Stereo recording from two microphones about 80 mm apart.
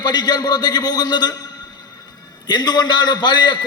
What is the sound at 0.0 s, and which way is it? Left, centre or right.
A man's voice, left.